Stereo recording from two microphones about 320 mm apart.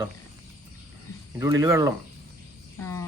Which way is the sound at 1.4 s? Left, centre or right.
Centre.